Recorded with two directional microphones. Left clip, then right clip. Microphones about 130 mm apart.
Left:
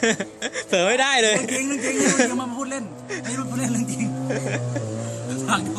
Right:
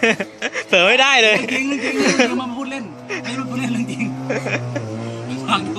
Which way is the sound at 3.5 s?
35° left (ahead or behind).